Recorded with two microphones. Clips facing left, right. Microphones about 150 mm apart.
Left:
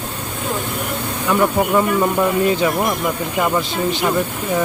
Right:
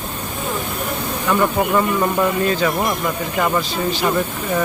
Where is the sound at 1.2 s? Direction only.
5° left (ahead or behind).